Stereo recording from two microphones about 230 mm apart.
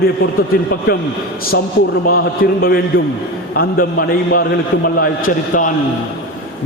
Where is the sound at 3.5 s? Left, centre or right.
Left.